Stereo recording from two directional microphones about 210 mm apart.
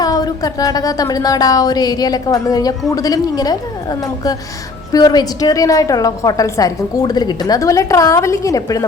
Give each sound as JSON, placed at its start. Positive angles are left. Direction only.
{"t": 0.0, "sound": "a woman's voice", "side_deg": 15}